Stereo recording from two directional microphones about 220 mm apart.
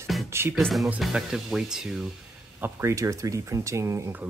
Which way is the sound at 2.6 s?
15° right (ahead or behind).